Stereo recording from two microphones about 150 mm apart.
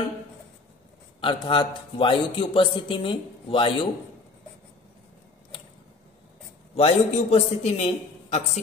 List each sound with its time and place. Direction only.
1.2 s a man's voice: 35° left (ahead or behind)
6.8 s a man's voice: 45° left (ahead or behind)